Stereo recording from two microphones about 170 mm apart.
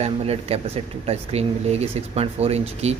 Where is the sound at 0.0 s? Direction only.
40° right (ahead or behind).